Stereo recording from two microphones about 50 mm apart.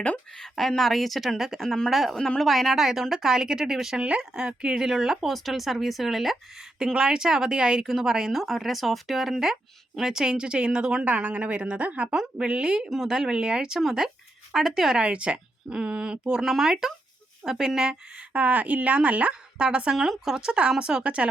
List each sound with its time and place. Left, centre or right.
0.3 s speech: centre
1.6 s speech: centre
3.9 s speech: right
5.3 s speech: centre
6.7 s speech: centre
8.4 s speech: centre
11.0 s speech: right
12.0 s speech: centre
14.9 s speech: right
18.2 s speech: right
20.0 s speech: centre